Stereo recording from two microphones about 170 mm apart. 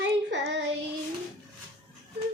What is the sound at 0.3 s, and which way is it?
Child singing, 90° right.